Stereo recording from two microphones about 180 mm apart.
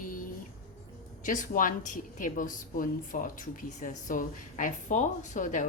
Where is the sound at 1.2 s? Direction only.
45° left (ahead or behind).